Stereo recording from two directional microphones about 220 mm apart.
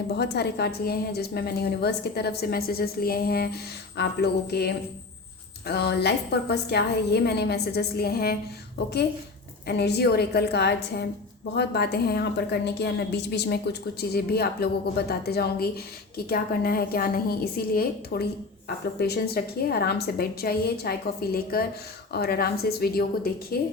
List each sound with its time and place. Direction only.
0.2 s a woman's voice: 50° left (ahead or behind)
9.6 s a woman's voice: 50° left (ahead or behind)